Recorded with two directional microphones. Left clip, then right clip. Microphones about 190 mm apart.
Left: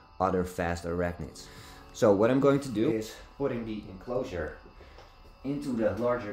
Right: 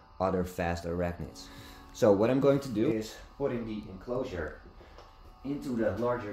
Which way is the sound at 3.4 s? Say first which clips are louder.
Left 1 dB; 30° left (ahead or behind).